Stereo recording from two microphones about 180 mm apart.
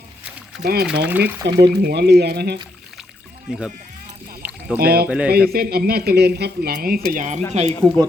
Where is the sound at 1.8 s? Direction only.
65° right (ahead or behind).